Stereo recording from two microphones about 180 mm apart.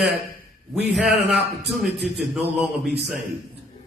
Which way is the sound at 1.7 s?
Centre (ahead or behind).